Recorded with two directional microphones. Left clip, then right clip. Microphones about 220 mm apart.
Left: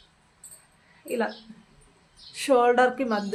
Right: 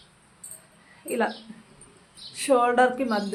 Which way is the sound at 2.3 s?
15° left (ahead or behind).